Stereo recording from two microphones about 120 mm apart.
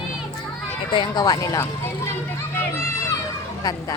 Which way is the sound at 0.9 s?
35° left (ahead or behind).